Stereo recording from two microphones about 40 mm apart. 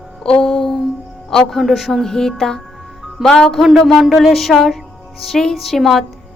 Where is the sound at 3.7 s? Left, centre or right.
Centre.